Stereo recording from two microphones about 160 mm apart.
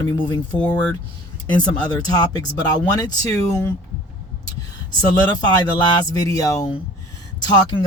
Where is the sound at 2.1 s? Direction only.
25° left (ahead or behind).